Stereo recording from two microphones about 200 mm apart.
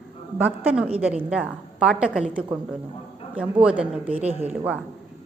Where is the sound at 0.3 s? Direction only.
10° right (ahead or behind).